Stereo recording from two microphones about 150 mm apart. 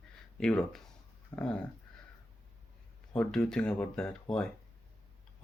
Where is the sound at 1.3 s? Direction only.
25° left (ahead or behind).